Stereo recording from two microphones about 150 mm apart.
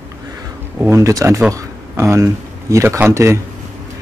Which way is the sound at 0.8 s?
20° right (ahead or behind).